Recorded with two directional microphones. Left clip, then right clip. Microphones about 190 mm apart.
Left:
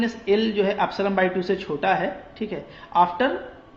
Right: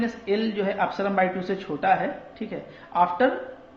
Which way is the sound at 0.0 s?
25° left (ahead or behind).